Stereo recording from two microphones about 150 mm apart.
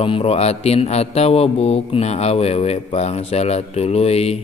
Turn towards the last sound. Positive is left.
turn(degrees=45)  # may be behind; listen again after turning